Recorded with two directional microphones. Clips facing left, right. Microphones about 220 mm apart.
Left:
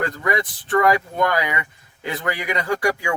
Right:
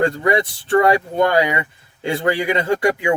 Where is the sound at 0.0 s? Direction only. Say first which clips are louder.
Right 6 dB; 30° right (ahead or behind).